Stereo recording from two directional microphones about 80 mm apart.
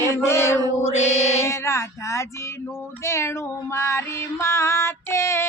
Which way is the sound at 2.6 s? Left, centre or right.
Left.